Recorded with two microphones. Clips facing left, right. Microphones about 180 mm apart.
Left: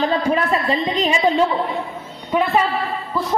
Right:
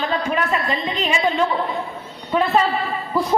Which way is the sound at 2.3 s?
15° left (ahead or behind).